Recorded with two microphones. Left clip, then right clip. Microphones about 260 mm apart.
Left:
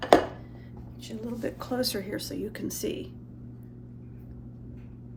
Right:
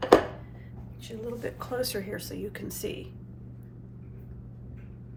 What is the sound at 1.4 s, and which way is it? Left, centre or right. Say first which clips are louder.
A woman's voice: left 3 dB; left.